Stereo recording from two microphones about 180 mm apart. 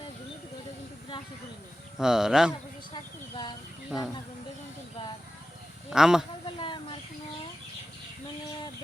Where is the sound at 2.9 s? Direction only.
25° left (ahead or behind).